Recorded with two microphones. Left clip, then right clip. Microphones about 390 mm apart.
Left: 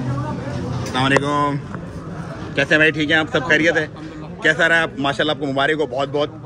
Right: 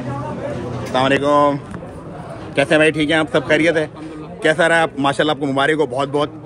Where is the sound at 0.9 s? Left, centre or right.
Centre.